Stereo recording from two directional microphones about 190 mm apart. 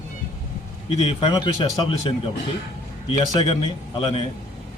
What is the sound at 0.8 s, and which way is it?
Speech, 30° left (ahead or behind).